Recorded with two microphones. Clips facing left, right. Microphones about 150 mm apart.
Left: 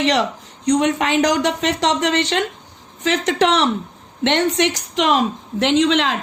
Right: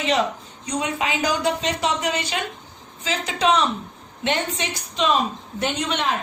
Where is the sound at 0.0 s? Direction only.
80° left.